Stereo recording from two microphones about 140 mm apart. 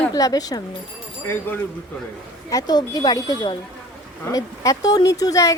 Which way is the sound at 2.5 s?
25° left (ahead or behind).